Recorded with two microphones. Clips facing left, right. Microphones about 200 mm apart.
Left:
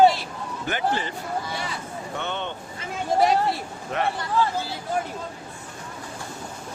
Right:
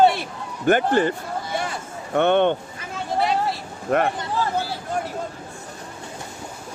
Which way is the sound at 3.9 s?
55° right (ahead or behind).